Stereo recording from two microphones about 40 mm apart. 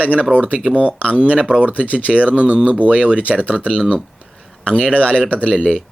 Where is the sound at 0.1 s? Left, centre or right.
Right.